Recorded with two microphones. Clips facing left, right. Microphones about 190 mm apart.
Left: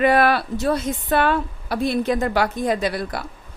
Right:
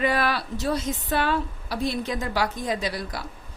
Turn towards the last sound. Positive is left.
turn(degrees=55)  # may be behind; listen again after turning